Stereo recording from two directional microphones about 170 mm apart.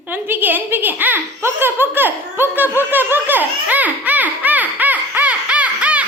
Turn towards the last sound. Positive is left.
turn(degrees=-10)  # may be behind; listen again after turning